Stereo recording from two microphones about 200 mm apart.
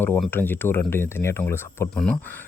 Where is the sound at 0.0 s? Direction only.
10° left (ahead or behind).